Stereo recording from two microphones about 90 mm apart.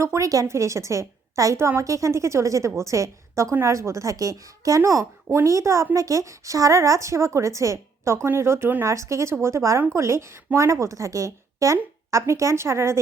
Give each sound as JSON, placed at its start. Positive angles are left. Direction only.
{"t": 0.0, "sound": "a woman's voice", "side_deg": -35}